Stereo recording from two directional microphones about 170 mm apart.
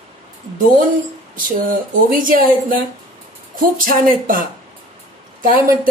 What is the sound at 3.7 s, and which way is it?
Speech, 55° right (ahead or behind).